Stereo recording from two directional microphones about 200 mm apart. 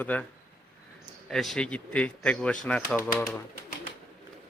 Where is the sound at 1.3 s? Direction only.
Centre (ahead or behind).